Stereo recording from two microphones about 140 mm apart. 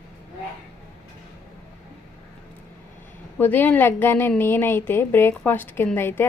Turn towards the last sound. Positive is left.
turn(degrees=15)  # may be behind; listen again after turning